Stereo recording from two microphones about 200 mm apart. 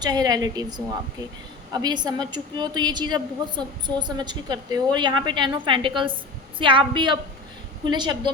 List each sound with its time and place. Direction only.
0.0 s a woman's voice: 20° right (ahead or behind)